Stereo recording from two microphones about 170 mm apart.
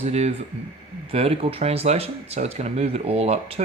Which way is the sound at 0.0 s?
40° right (ahead or behind).